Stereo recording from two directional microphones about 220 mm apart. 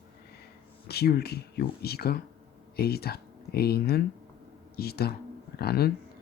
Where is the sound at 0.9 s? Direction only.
45° left (ahead or behind).